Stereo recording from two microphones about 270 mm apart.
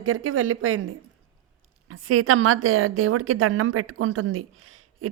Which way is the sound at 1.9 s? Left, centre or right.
Right.